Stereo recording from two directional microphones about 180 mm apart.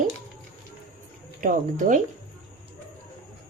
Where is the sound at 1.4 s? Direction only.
45° right (ahead or behind).